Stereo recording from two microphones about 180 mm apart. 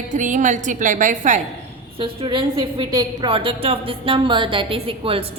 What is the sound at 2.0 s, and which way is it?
A woman's voice, 30° right (ahead or behind).